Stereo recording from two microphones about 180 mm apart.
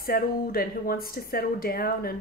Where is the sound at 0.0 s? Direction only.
55° left (ahead or behind).